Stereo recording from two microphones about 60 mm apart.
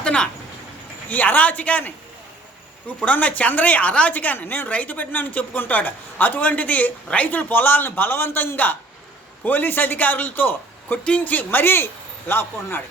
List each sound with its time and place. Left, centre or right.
0.0 s a sound: centre
1.1 s a woman's voice: left
3.0 s a woman's voice: left